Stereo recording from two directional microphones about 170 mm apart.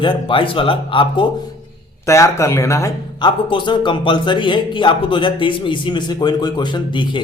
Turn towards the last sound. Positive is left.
turn(degrees=25)  # may be behind; listen again after turning